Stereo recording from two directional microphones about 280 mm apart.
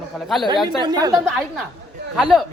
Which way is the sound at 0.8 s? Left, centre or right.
Centre.